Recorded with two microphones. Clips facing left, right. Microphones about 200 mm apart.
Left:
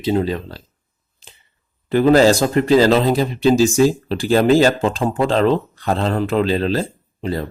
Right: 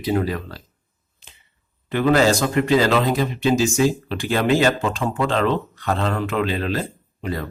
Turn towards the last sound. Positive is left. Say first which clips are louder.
# left 4 dB
turn(degrees=30)  # may be behind; listen again after turning